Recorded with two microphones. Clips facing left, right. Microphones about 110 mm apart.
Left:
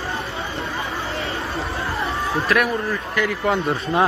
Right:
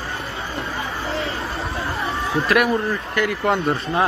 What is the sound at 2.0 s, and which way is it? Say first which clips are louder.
Speech: right 1 dB; centre (ahead or behind).